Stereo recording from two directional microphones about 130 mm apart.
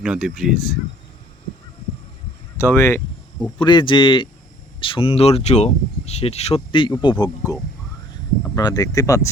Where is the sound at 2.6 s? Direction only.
20° left (ahead or behind).